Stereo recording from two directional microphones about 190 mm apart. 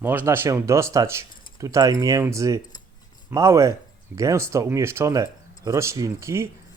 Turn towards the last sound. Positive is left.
turn(degrees=-15)  # may be behind; listen again after turning